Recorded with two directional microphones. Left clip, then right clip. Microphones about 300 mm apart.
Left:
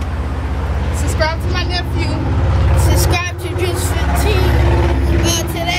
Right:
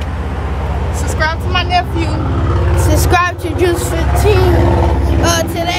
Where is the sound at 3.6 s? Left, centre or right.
Right.